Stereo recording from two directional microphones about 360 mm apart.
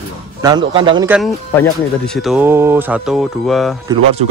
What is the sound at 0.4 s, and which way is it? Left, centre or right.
Speech, centre.